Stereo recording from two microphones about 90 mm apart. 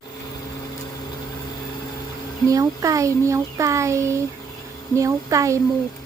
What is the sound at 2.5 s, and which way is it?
A child's voice, 40° right (ahead or behind).